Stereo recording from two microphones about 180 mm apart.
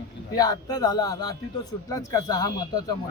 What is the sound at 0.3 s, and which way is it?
A man's voice, 20° left (ahead or behind).